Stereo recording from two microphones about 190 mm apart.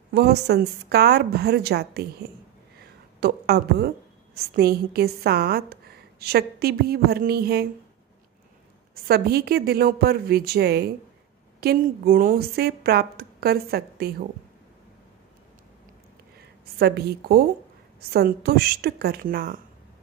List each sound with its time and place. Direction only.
0.1 s a woman's voice: 60° right (ahead or behind)
3.2 s a woman's voice: 60° right (ahead or behind)
9.0 s a woman's voice: 55° right (ahead or behind)
16.7 s a woman's voice: 55° right (ahead or behind)